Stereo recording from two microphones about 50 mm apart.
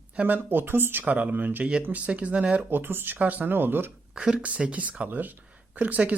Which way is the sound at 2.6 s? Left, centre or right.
Right.